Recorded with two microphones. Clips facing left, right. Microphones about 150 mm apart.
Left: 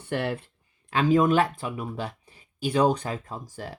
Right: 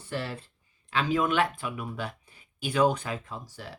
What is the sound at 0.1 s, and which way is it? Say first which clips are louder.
Speech: left 6 dB; 60° left (ahead or behind).